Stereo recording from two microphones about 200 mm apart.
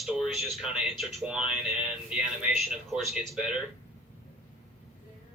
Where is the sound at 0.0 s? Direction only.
Centre (ahead or behind).